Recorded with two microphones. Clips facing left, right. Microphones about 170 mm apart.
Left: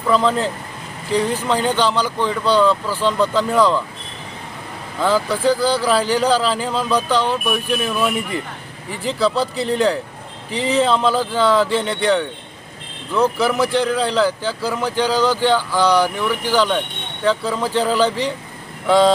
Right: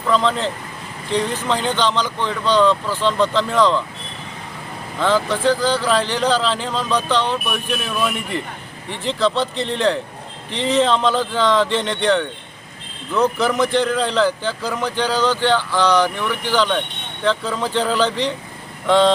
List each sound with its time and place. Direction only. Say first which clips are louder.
0.1 s speech: left 2 dB; 10° left (ahead or behind)
4.9 s speech: even; 10° left (ahead or behind)